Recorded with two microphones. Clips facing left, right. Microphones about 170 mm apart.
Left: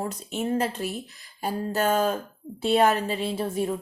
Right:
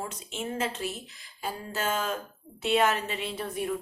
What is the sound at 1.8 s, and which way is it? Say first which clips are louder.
Speech: left 6 dB; 40° left (ahead or behind).